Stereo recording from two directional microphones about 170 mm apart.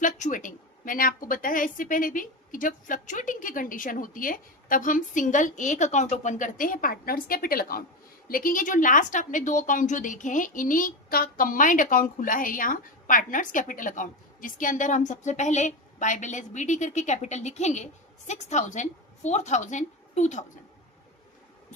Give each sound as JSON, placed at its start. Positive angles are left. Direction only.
{"t": 0.0, "sound": "a woman's voice", "side_deg": 50}